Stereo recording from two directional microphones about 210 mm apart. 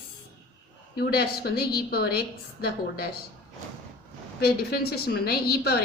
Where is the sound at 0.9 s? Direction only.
50° left (ahead or behind).